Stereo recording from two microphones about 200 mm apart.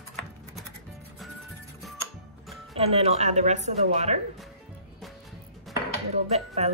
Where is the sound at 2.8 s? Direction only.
30° right (ahead or behind).